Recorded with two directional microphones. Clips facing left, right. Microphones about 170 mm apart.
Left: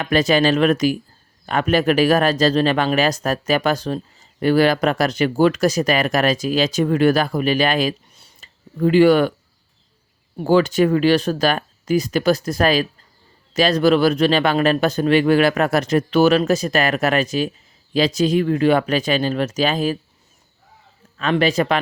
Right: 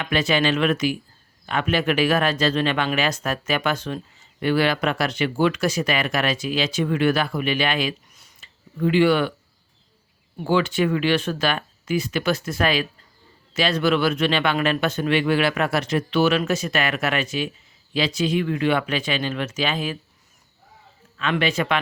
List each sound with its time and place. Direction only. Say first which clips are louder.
0.0 s speech: left 5 dB; 40° left (ahead or behind)
10.3 s speech: left 5 dB; 40° left (ahead or behind)
21.2 s speech: left 5 dB; 40° left (ahead or behind)